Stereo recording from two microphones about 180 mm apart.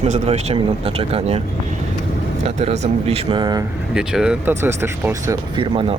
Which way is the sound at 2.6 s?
35° right (ahead or behind).